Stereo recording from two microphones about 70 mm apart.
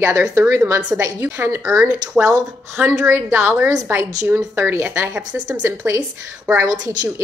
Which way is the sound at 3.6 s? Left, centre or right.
Right.